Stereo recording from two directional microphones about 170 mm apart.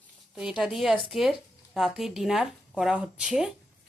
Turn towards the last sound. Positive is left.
turn(degrees=-5)  # may be behind; listen again after turning